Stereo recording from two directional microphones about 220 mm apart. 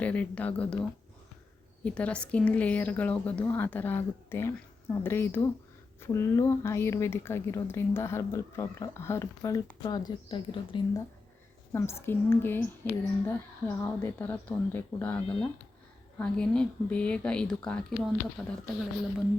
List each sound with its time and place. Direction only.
0.0 s a woman's voice: 5° left (ahead or behind); by 10.8 s 20° left (ahead or behind)
11.7 s a woman's voice: 10° left (ahead or behind)